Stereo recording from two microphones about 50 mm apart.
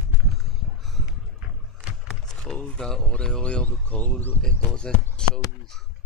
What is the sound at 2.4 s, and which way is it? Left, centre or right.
Speech, centre.